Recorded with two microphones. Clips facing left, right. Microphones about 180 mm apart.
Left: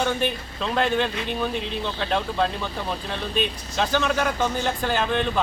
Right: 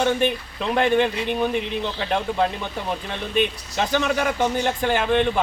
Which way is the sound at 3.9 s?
15° right (ahead or behind).